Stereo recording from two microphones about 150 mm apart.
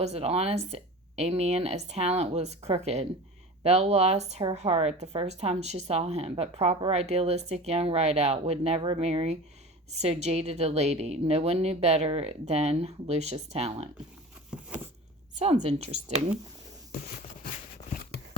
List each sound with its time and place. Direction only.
0.0 s speech: 45° right (ahead or behind)
15.4 s speech: 50° right (ahead or behind)